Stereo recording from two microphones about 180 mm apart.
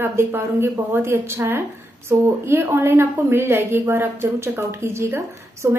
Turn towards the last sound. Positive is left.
turn(degrees=-15)  # may be behind; listen again after turning